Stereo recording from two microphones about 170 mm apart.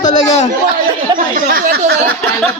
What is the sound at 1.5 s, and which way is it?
Speech, 60° right (ahead or behind).